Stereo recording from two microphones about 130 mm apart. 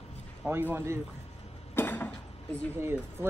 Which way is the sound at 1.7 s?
15° left (ahead or behind).